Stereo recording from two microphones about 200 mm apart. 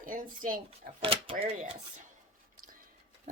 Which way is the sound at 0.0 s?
45° right (ahead or behind).